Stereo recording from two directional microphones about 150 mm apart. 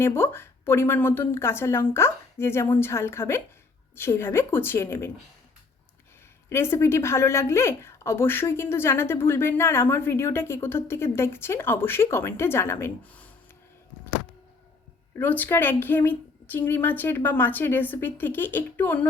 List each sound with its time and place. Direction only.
0.0 s a woman's voice: 15° left (ahead or behind)
6.5 s a woman's voice: 15° left (ahead or behind)
15.1 s a woman's voice: 10° left (ahead or behind)